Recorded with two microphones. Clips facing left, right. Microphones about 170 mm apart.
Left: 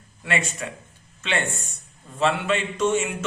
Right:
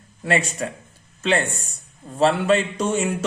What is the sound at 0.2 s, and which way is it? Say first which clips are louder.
Speech: right 5 dB; 40° right (ahead or behind).